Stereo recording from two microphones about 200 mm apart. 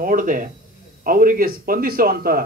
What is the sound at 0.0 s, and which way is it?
A man's voice, 40° right (ahead or behind).